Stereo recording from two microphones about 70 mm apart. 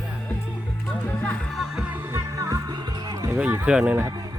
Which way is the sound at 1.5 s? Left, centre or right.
Centre.